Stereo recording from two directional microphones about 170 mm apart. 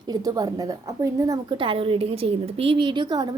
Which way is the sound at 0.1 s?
20° right (ahead or behind).